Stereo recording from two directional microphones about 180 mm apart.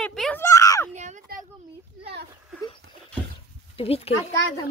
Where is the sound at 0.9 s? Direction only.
40° right (ahead or behind).